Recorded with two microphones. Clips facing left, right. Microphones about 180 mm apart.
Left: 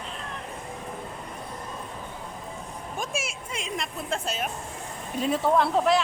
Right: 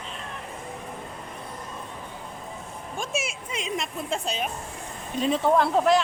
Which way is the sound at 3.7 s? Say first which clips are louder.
Right 1 dB; centre (ahead or behind).